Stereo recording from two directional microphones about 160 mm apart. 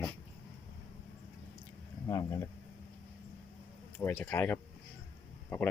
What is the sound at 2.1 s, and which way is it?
Speech, 20° left (ahead or behind).